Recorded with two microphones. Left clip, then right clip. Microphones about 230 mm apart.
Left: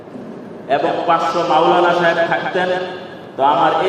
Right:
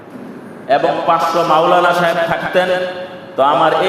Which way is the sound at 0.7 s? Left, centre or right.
Right.